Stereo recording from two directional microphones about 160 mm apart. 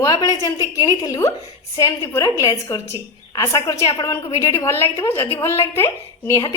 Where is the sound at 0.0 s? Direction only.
25° left (ahead or behind).